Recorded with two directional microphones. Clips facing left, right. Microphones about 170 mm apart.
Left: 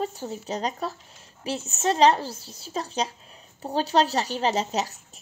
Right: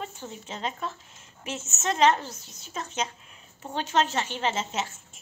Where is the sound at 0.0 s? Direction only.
35° left (ahead or behind).